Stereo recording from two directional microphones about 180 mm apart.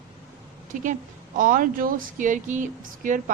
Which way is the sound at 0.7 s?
45° right (ahead or behind).